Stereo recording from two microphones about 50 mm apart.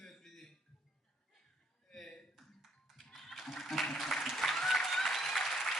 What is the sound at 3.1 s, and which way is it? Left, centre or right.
Applause, centre.